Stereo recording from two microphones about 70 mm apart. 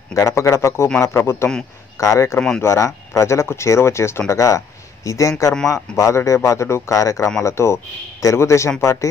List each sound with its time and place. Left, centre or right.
0.1 s speech: left
2.0 s speech: left
4.3 s speech: left
7.4 s speech: left